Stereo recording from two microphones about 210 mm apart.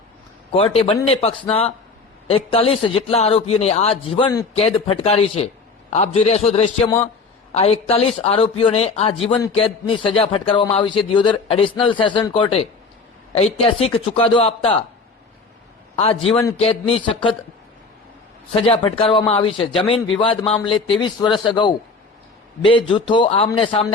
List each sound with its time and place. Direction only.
0.5 s a man's voice: 25° left (ahead or behind)
16.0 s a man's voice: 25° left (ahead or behind)
18.5 s a man's voice: 25° left (ahead or behind)